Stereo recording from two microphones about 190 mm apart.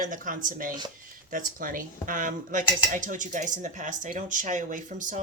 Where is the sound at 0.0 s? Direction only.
45° right (ahead or behind).